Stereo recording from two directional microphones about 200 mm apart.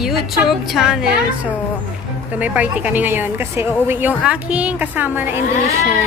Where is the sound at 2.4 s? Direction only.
5° right (ahead or behind).